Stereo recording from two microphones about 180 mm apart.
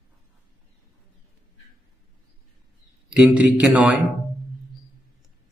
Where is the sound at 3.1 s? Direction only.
5° right (ahead or behind).